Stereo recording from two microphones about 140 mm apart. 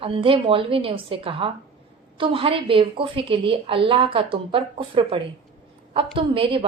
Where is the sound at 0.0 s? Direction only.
40° right (ahead or behind).